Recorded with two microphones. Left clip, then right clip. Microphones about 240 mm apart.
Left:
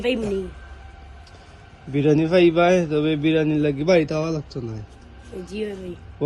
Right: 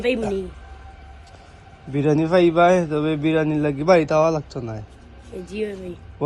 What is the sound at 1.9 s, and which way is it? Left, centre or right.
Speech, right.